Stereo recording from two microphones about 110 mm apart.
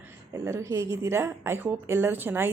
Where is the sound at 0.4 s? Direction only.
25° right (ahead or behind).